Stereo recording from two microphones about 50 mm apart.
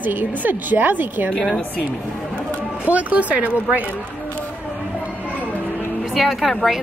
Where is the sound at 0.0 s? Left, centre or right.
Right.